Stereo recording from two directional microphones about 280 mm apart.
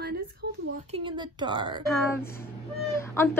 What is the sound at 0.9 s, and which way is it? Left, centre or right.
Speech, centre.